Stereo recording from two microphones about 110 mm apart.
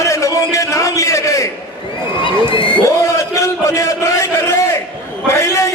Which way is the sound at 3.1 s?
30° left (ahead or behind).